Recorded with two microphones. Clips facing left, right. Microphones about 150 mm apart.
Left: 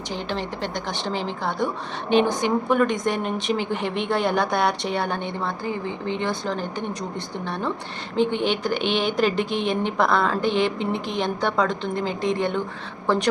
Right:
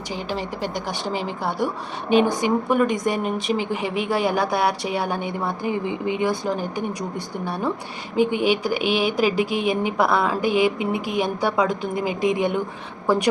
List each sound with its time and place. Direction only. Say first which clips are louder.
0.1 s a woman's voice: right 1 dB; 5° right (ahead or behind)